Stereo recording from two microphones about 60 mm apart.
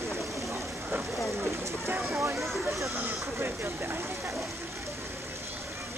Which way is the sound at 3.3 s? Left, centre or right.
Right.